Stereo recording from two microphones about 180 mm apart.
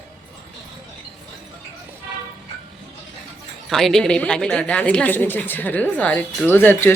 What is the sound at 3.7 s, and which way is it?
A woman's voice, centre (ahead or behind).